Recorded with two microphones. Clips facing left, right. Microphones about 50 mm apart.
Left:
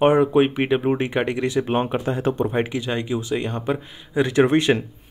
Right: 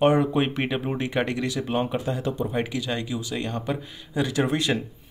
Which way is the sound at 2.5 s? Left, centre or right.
Left.